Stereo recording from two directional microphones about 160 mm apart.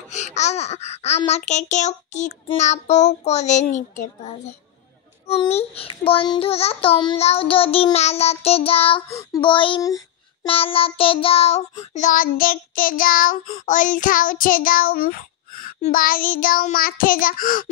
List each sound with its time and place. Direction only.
0.1 s a child's voice: 45° left (ahead or behind)
5.2 s a child's voice: 40° left (ahead or behind)
9.1 s a child's voice: 25° left (ahead or behind)
10.4 s a child's voice: 35° left (ahead or behind); by 12.3 s 50° left (ahead or behind)
12.3 s child singing: 65° left (ahead or behind)